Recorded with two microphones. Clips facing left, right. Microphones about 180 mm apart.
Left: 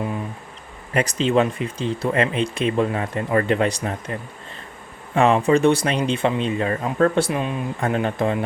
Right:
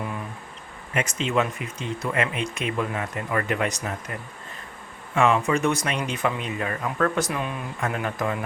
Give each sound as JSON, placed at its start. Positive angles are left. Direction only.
{"t": 0.9, "sound": "speech", "side_deg": 35}